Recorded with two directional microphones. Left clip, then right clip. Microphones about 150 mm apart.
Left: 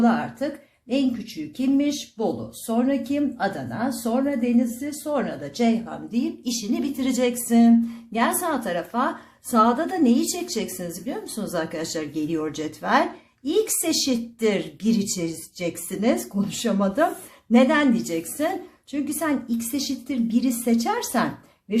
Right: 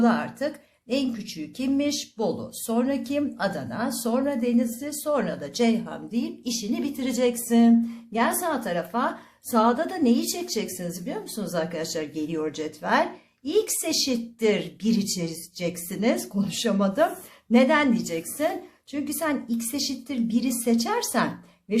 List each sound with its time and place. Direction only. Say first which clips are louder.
0.0 s a woman's voice: left 1 dB; 45° right (ahead or behind); by 21.2 s 30° right (ahead or behind)